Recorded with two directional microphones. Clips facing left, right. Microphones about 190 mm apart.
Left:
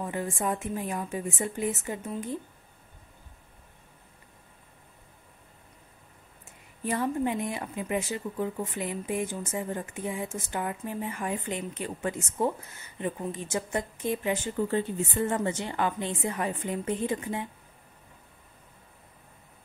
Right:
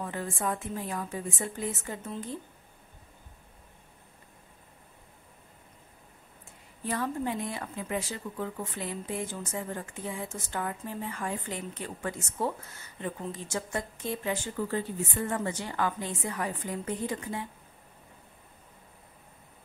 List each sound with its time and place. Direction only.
0.0 s a woman's voice: 15° left (ahead or behind)
6.8 s a woman's voice: 15° left (ahead or behind)